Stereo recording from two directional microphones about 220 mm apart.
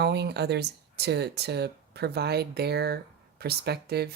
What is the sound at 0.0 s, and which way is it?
Speech, 50° right (ahead or behind).